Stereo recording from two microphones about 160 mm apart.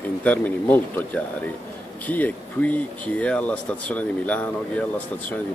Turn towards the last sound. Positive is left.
turn(degrees=10)  # may be behind; listen again after turning